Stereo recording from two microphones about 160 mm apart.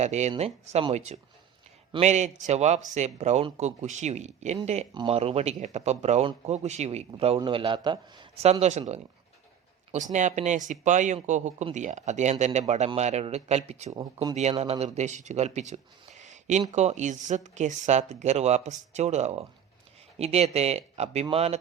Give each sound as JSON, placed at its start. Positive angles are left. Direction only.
{"t": 0.0, "sound": "speech", "side_deg": -45}
{"t": 9.9, "sound": "speech", "side_deg": -50}